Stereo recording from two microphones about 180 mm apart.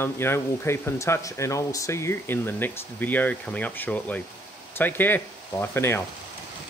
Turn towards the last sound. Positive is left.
turn(degrees=15)  # may be behind; listen again after turning